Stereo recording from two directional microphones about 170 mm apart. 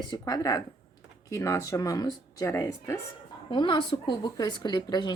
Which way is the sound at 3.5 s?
30° left (ahead or behind).